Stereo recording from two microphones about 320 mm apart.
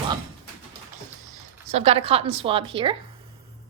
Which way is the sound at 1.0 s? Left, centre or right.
Right.